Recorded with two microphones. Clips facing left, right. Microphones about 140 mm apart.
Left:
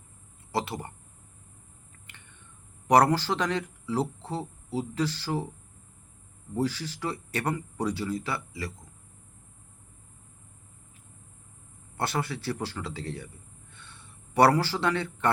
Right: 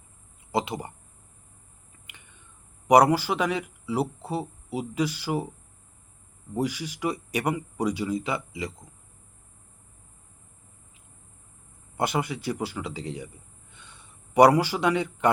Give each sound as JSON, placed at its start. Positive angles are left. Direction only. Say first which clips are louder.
{"t": 0.5, "sound": "speech", "louder": "right 3 dB", "side_deg": -15}
{"t": 2.8, "sound": "speech", "louder": "right 3 dB", "side_deg": -10}
{"t": 6.5, "sound": "speech", "louder": "right 1 dB", "side_deg": -15}
{"t": 11.9, "sound": "speech", "louder": "right 3 dB", "side_deg": -15}
{"t": 13.7, "sound": "a sound", "louder": "right 1 dB", "side_deg": -15}